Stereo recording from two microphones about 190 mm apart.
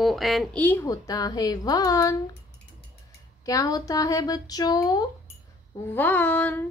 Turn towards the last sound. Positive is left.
turn(degrees=10)  # may be behind; listen again after turning